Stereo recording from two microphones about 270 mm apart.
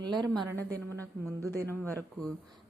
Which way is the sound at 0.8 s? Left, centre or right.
Centre.